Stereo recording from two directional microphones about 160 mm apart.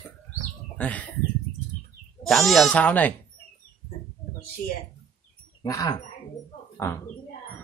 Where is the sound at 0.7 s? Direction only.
10° left (ahead or behind).